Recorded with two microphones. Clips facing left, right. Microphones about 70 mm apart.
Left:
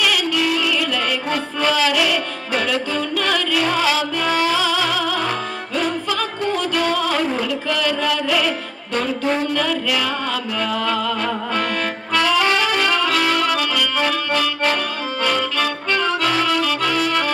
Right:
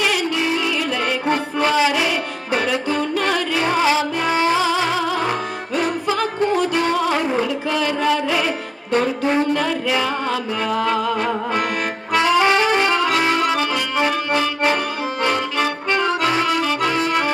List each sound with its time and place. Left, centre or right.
0.0 s music: right
12.1 s saxophone: right
15.2 s accordion: right